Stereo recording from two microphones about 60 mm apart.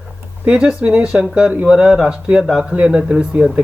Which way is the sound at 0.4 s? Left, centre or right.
Centre.